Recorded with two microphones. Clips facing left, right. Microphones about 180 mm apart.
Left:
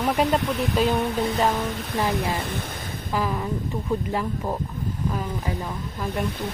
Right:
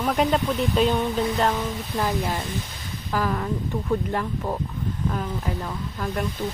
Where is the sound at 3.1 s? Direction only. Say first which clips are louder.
Right 1 dB; 5° left (ahead or behind).